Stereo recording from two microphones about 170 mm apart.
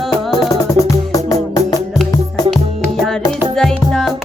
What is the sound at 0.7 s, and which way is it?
Music, 20° left (ahead or behind).